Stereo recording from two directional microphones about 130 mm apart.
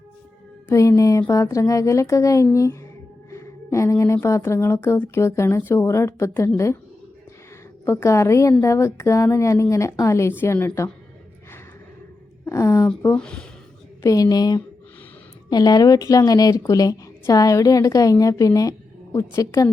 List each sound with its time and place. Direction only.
0.7 s speech: 25° left (ahead or behind)
7.9 s speech: 20° left (ahead or behind)
12.5 s speech: 25° left (ahead or behind)
13.1 s speech: 5° left (ahead or behind)
14.0 s speech: 30° left (ahead or behind)